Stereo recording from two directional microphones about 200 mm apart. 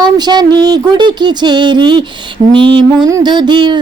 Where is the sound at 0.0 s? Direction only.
20° right (ahead or behind).